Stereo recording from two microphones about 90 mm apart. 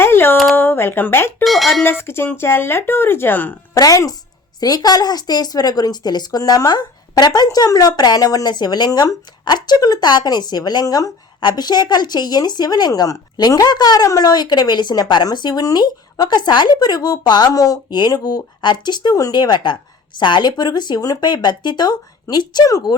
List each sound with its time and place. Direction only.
0.0 s a sound: 25° left (ahead or behind)
0.5 s speech: 25° left (ahead or behind)
1.5 s speech: centre (ahead or behind)
1.8 s speech: 25° left (ahead or behind)
3.8 s a woman's voice: 40° left (ahead or behind)